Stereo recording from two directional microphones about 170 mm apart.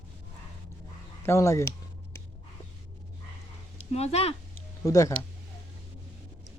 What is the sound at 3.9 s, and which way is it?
Speech, 40° left (ahead or behind).